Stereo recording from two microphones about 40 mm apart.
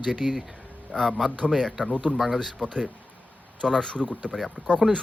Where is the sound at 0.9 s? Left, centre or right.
Centre.